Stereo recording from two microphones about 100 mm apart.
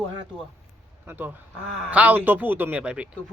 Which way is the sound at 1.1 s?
15° right (ahead or behind).